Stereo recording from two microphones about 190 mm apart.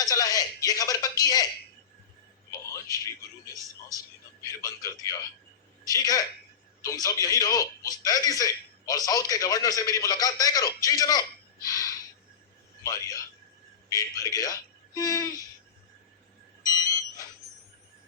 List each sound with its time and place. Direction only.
0.0 s a man's voice: 20° left (ahead or behind)
4.6 s a man's voice: 15° left (ahead or behind)
16.6 s a sound: 20° left (ahead or behind)